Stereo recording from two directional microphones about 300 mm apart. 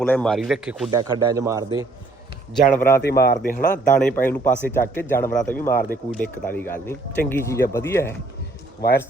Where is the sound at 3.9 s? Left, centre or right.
Centre.